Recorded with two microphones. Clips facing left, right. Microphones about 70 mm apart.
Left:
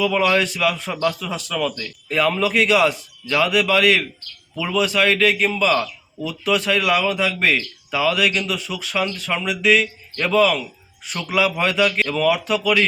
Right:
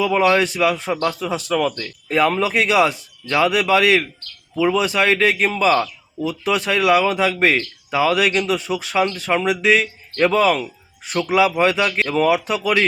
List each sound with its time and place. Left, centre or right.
0.0 s a man's voice: right
7.2 s a man's voice: right